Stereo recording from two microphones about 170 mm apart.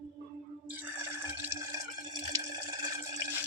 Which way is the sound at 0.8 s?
15° right (ahead or behind).